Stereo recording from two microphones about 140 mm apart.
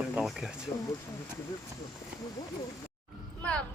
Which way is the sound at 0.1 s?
5° right (ahead or behind).